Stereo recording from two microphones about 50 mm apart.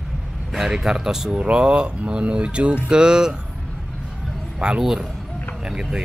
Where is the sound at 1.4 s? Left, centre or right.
Right.